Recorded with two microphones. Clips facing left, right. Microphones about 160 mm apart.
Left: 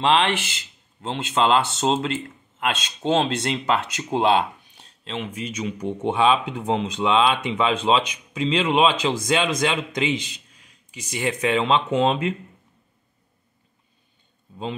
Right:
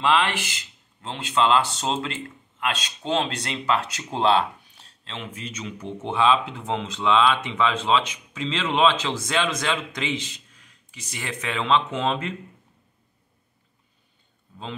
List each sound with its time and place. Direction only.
0.0 s speech: 25° left (ahead or behind)